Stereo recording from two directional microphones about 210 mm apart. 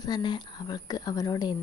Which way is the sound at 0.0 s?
20° left (ahead or behind).